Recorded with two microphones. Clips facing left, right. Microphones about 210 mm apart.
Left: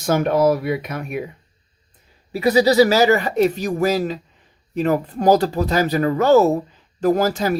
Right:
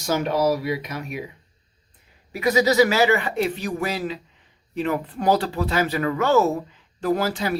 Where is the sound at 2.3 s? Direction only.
35° left (ahead or behind).